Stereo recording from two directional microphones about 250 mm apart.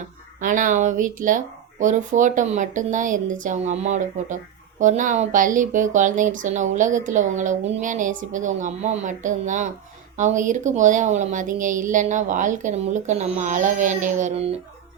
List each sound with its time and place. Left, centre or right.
0.3 s a woman's voice: right